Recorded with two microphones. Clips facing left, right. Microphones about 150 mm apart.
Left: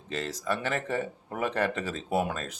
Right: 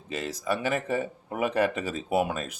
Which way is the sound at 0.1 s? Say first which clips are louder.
Right 2 dB; 10° right (ahead or behind).